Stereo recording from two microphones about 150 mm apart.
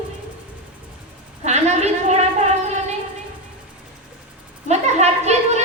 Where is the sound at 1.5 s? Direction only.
45° right (ahead or behind).